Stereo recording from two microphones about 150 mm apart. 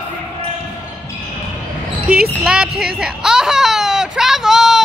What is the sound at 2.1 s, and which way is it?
Baby cry, 5° right (ahead or behind).